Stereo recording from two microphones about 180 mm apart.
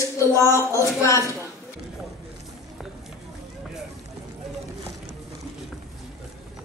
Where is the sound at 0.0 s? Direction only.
15° left (ahead or behind).